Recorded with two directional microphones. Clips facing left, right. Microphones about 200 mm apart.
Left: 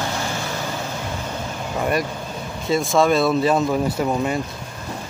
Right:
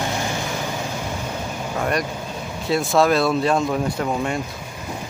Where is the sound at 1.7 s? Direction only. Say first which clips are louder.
Left 1 dB; 5° left (ahead or behind).